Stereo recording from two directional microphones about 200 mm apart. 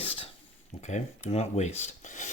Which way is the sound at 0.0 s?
25° left (ahead or behind).